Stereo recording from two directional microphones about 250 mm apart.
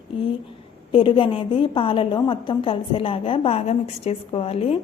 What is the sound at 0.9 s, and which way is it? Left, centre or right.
A woman's voice, centre.